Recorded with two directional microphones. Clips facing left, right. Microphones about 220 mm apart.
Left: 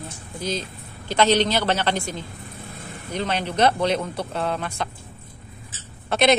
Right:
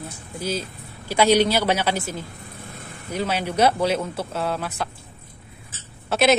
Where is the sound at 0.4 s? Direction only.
10° right (ahead or behind).